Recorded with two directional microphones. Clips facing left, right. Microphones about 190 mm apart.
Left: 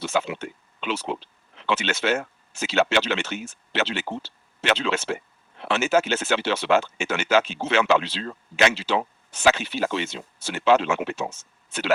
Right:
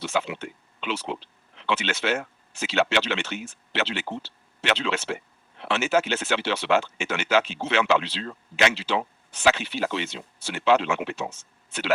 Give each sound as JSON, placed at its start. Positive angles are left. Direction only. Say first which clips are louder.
{"t": 0.0, "sound": "speech", "louder": "left 2 dB", "side_deg": 45}